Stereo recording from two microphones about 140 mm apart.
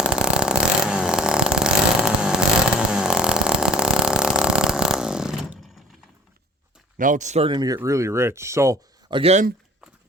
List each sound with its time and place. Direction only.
0.0 s vehicle: 5° right (ahead or behind)
6.9 s speech: 65° right (ahead or behind)
7.4 s speech: 30° right (ahead or behind)
7.8 s speech: 20° right (ahead or behind)
9.0 s speech: 35° right (ahead or behind)